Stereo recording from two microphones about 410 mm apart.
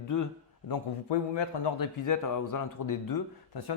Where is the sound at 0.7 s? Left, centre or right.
Left.